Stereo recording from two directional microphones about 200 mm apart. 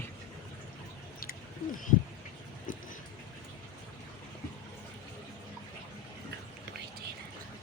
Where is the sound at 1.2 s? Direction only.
50° left (ahead or behind).